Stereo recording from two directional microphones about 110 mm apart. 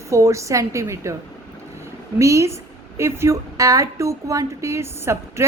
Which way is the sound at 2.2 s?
30° right (ahead or behind).